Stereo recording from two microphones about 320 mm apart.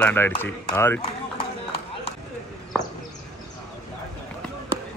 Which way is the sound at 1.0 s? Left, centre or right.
Centre.